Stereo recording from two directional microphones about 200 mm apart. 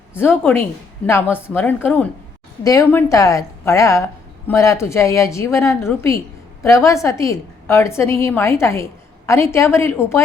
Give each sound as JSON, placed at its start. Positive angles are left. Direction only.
{"t": 0.1, "sound": "a woman's voice", "side_deg": 10}